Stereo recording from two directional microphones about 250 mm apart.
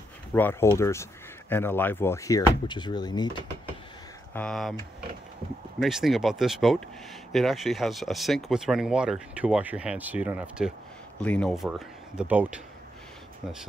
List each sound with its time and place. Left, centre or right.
0.3 s speech: centre
4.3 s speech: centre
5.8 s speech: centre